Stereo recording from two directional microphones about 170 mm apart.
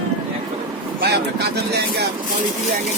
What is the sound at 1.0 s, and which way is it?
Speech, 75° right (ahead or behind).